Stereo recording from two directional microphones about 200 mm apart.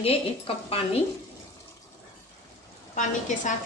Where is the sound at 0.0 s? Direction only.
30° left (ahead or behind).